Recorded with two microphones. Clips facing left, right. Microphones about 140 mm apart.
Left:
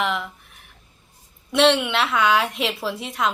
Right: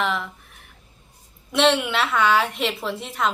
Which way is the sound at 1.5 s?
Centre (ahead or behind).